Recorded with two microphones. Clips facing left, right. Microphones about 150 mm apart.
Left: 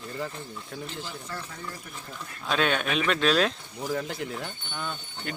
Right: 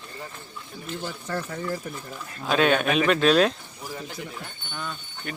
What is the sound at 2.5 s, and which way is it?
Speech, 5° right (ahead or behind).